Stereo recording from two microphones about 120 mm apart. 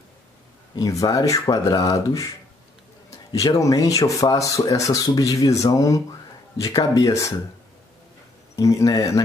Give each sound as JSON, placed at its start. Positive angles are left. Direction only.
{"t": 0.7, "sound": "speech", "side_deg": 30}
{"t": 3.3, "sound": "speech", "side_deg": 25}
{"t": 8.5, "sound": "speech", "side_deg": 25}